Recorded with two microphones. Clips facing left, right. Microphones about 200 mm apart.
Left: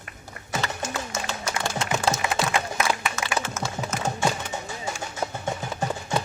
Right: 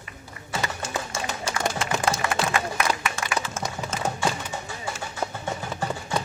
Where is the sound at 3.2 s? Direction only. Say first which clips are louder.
Left 1 dB; 30° right (ahead or behind).